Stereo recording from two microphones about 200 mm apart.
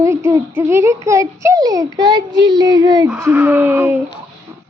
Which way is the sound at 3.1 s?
10° right (ahead or behind).